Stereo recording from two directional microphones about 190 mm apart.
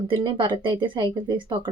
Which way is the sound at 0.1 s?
25° right (ahead or behind).